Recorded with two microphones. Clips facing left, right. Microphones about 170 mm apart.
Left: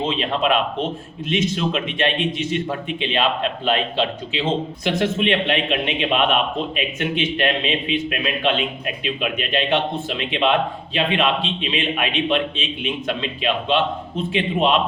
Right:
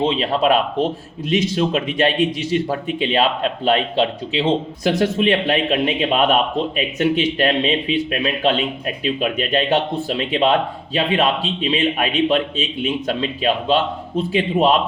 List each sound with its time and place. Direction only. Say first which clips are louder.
0.0 s a man's voice: right 4 dB; 35° right (ahead or behind)
4.4 s a man's voice: right 4 dB; 40° right (ahead or behind)